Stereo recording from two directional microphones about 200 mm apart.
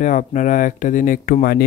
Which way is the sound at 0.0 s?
40° left (ahead or behind).